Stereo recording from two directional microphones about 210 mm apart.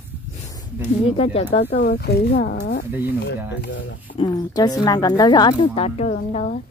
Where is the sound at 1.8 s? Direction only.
45° left (ahead or behind).